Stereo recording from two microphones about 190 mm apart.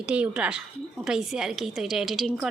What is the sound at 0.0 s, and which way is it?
A woman's voice, 5° right (ahead or behind).